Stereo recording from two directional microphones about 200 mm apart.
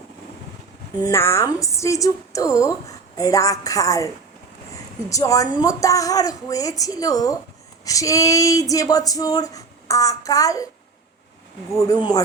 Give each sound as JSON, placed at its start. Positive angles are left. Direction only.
{"t": 0.9, "sound": "a woman's voice", "side_deg": 15}